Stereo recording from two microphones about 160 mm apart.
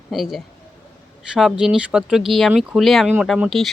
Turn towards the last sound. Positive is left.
turn(degrees=0)  # may be behind; listen again after turning